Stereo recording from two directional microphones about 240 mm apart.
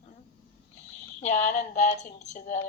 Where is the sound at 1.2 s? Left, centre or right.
Left.